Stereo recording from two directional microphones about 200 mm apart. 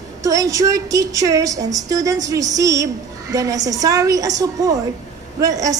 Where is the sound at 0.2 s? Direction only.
15° right (ahead or behind).